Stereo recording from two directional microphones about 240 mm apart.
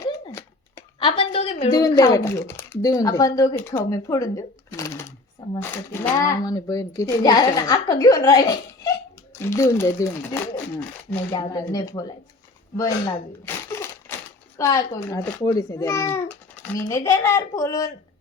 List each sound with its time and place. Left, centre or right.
0.0 s a sound: centre
1.8 s speech: centre
13.7 s typewriter: centre
14.6 s speech: centre